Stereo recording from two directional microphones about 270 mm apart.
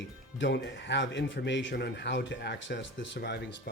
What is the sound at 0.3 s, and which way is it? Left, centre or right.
Speech, left.